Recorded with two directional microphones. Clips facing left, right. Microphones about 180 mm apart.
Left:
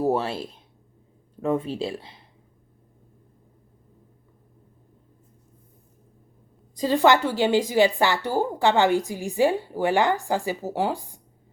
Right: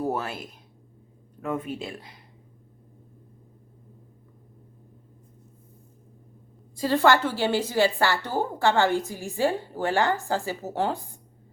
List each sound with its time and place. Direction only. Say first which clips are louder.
0.0 s speech: left 5 dB; 30° left (ahead or behind)
6.7 s a woman's voice: left 2 dB; 15° left (ahead or behind)